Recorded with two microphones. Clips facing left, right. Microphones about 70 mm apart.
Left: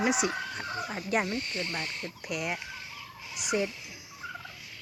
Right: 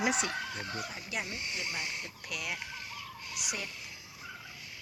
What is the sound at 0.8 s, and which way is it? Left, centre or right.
Speech, left.